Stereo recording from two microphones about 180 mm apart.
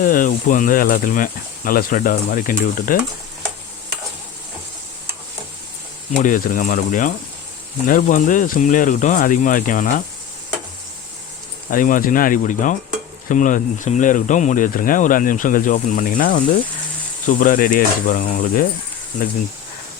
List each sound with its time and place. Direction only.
0.0 s speech: 50° left (ahead or behind)
6.1 s speech: 45° left (ahead or behind)
11.7 s speech: 50° left (ahead or behind)